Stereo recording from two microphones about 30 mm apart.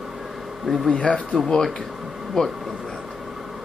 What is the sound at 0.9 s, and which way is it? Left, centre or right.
Speech, left.